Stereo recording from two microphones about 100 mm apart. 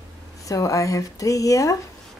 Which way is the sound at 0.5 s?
35° left (ahead or behind).